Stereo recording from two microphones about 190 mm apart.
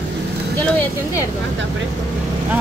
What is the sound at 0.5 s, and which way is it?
Speech, 10° left (ahead or behind).